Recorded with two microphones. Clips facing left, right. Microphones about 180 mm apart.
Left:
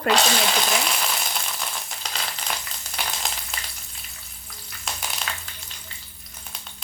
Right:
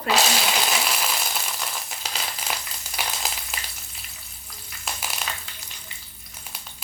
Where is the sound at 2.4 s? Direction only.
5° right (ahead or behind).